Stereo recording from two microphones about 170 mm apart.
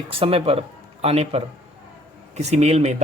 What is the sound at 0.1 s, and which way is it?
Speech, 35° right (ahead or behind).